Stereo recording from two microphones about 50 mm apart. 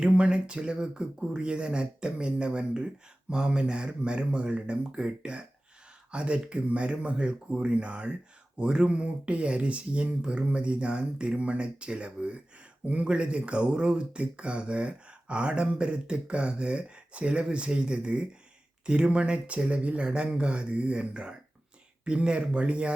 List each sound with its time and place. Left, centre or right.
0.0 s speech: centre